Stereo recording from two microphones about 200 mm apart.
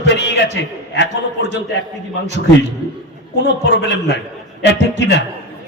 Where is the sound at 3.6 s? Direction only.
60° left (ahead or behind).